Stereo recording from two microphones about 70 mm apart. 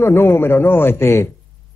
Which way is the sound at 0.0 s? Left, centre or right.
Left.